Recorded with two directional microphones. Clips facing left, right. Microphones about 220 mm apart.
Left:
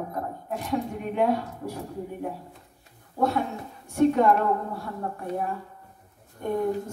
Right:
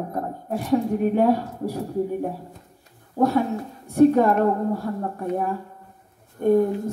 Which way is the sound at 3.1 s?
35° right (ahead or behind).